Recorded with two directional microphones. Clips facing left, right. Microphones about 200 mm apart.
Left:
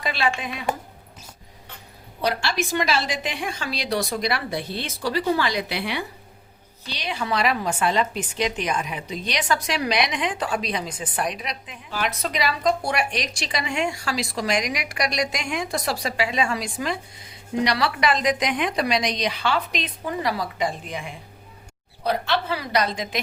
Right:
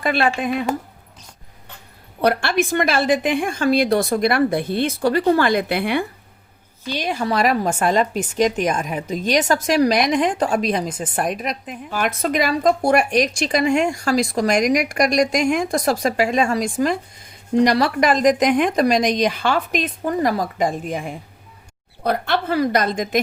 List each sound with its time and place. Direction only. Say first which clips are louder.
0.0 s a woman's voice: right 6 dB; 55° right (ahead or behind)
2.2 s a woman's voice: right 6 dB; 55° right (ahead or behind)